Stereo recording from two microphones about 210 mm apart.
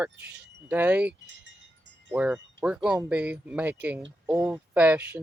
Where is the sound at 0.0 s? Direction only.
5° right (ahead or behind).